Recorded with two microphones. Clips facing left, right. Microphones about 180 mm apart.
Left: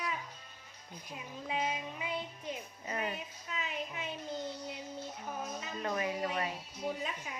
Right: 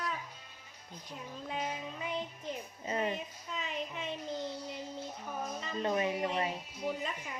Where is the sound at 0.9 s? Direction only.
10° left (ahead or behind).